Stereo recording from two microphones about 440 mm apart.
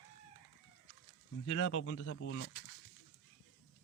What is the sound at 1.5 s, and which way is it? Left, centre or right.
A man's voice, left.